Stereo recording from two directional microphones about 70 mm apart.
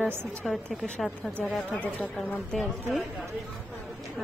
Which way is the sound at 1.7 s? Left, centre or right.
Left.